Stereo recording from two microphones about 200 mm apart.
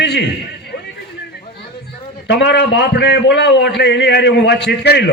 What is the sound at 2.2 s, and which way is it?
A man's voice, 60° left (ahead or behind).